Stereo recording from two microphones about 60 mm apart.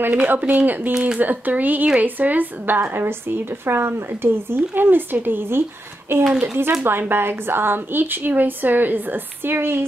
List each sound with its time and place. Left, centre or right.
0.0 s speech: right
0.9 s speech: centre
1.2 s a woman's voice: right
2.8 s a woman's voice: right
6.4 s a woman's voice: right